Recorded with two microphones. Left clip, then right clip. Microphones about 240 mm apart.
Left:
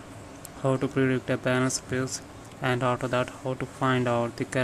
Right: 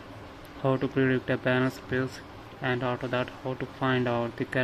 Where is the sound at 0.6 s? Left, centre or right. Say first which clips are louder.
Left 1 dB; centre.